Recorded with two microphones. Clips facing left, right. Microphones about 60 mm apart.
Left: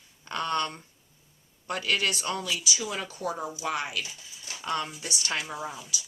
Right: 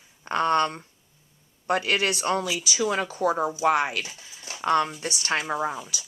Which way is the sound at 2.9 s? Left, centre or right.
Right.